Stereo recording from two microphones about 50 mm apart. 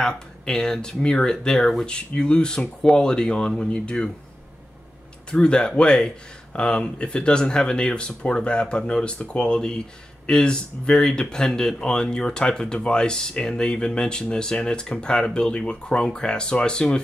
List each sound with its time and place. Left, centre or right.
0.0 s speech: centre
5.3 s speech: centre